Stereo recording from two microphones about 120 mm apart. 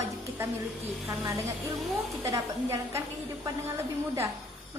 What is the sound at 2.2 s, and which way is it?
A woman's voice, 25° right (ahead or behind).